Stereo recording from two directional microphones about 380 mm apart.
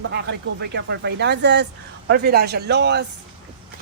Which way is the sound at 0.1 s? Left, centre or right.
Right.